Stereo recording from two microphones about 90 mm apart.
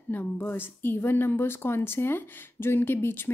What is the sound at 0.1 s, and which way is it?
A woman's voice, 20° left (ahead or behind).